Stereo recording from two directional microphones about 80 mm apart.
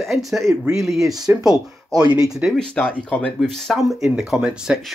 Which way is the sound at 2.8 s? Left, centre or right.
Centre.